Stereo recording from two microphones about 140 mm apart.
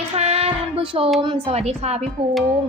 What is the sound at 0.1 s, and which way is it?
Child singing, 45° right (ahead or behind).